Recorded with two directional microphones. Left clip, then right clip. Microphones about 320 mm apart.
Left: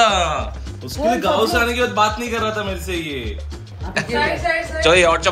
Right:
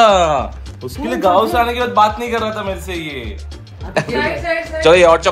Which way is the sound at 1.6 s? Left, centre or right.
Centre.